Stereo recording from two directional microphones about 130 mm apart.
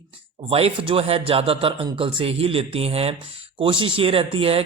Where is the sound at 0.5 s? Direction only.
45° right (ahead or behind).